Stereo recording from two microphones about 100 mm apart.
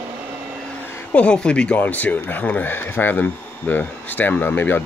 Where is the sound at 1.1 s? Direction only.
10° left (ahead or behind).